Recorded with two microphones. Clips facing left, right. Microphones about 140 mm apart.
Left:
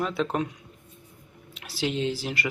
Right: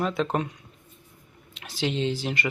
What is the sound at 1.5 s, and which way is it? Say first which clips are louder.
Speech: right 1 dB; 5° left (ahead or behind).